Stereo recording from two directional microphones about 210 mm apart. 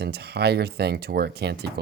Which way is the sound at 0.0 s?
50° right (ahead or behind).